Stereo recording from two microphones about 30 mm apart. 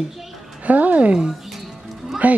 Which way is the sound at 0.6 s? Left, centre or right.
Right.